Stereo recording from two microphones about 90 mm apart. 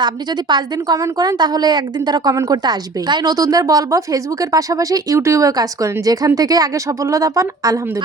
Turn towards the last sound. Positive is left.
turn(degrees=-40)  # may be behind; listen again after turning